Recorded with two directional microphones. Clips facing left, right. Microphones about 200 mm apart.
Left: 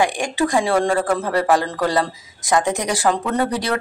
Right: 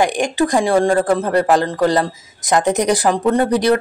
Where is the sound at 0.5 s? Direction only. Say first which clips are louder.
Right 3 dB; 40° right (ahead or behind).